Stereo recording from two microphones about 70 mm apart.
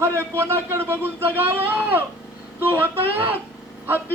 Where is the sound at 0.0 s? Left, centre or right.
Right.